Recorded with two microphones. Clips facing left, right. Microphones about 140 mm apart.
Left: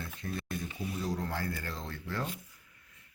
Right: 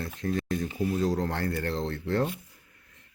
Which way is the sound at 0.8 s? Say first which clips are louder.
Right 8 dB; 75° right (ahead or behind).